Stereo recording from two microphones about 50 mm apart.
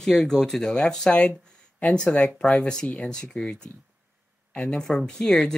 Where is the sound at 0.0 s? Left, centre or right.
Centre.